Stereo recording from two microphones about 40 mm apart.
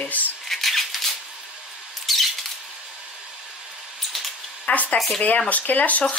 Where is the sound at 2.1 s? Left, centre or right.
Centre.